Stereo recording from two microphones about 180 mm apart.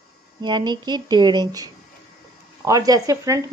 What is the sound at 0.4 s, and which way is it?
Speech, 25° right (ahead or behind).